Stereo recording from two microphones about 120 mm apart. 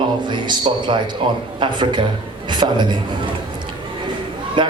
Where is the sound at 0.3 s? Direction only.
40° right (ahead or behind).